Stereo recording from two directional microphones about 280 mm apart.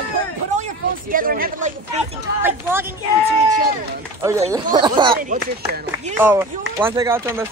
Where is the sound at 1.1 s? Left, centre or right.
Right.